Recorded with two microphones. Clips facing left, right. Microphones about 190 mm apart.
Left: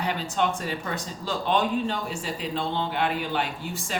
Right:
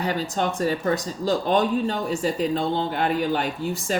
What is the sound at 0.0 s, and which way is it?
A woman's voice, 40° right (ahead or behind).